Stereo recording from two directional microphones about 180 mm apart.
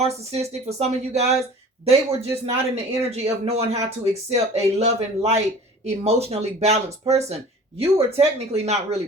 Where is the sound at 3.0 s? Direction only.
35° right (ahead or behind).